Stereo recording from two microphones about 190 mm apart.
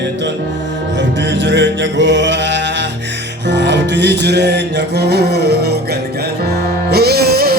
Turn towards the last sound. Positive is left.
turn(degrees=-55)  # may be behind; listen again after turning